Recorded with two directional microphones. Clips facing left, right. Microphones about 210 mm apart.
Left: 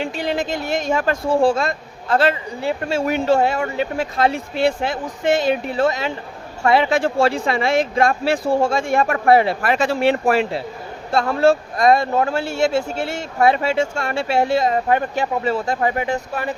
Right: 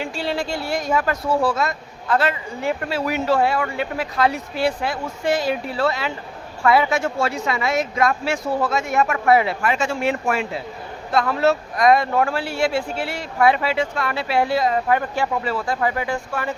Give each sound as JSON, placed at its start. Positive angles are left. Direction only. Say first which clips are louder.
{"t": 0.0, "sound": "speech", "louder": "left 2 dB", "side_deg": 20}